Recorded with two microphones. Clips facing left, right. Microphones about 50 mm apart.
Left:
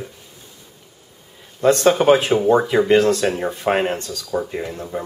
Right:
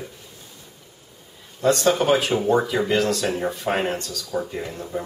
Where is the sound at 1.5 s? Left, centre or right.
Left.